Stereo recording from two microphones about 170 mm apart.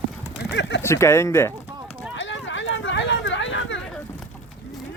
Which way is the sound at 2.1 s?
90° left.